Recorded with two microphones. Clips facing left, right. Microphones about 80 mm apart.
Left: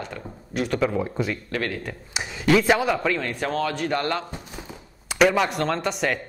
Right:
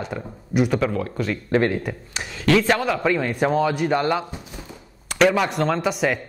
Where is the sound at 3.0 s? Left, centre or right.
Centre.